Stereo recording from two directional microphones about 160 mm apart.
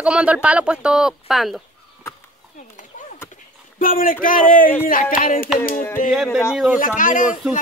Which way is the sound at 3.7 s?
60° left (ahead or behind).